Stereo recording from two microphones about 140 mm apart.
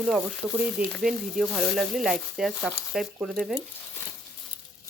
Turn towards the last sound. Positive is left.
turn(degrees=0)  # may be behind; listen again after turning